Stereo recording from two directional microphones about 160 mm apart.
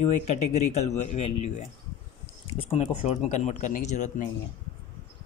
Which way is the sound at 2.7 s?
45° left (ahead or behind).